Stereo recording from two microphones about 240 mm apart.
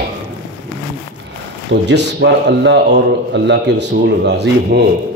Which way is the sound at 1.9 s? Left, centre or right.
Right.